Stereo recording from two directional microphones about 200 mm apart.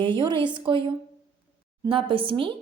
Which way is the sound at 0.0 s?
25° right (ahead or behind).